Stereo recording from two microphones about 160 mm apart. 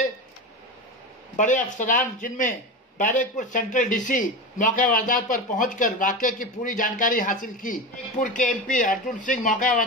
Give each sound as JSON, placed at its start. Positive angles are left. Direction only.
{"t": 1.3, "sound": "a man's voice", "side_deg": 50}